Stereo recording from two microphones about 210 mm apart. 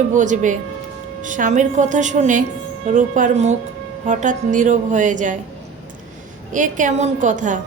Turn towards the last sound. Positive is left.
turn(degrees=-35)  # may be behind; listen again after turning